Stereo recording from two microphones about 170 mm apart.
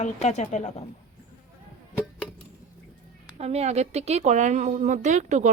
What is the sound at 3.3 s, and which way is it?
A woman's voice, 40° right (ahead or behind).